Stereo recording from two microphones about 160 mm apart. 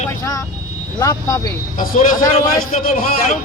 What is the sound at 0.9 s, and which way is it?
Speech, 20° left (ahead or behind).